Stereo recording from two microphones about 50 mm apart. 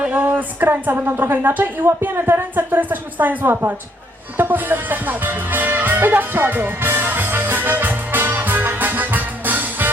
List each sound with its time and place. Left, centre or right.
0.0 s a sound: right
0.3 s a woman's voice: right
5.9 s music: right